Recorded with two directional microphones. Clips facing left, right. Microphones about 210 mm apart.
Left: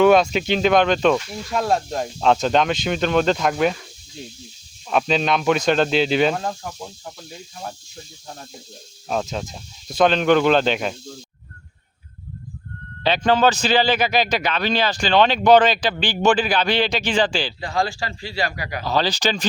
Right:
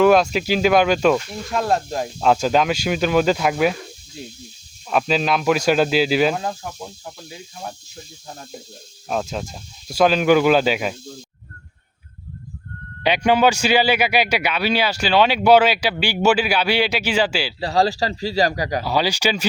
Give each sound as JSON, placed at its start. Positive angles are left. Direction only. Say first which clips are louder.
{"t": 0.0, "sound": "speech", "louder": "even", "side_deg": 0}
{"t": 9.0, "sound": "speech", "louder": "even", "side_deg": 0}
{"t": 13.0, "sound": "a man's voice", "louder": "right 1 dB", "side_deg": -15}
{"t": 17.6, "sound": "a man's voice", "louder": "right 9 dB", "side_deg": -35}
{"t": 18.9, "sound": "a man's voice", "louder": "left 1 dB", "side_deg": -10}